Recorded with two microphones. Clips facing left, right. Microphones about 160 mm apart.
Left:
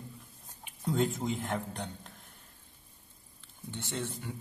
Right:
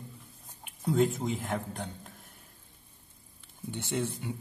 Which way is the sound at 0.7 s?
Centre (ahead or behind).